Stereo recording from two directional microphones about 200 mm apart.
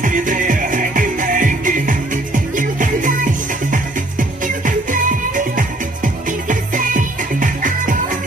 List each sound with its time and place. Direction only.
0.0 s music: 40° right (ahead or behind)
4.2 s music: 40° right (ahead or behind)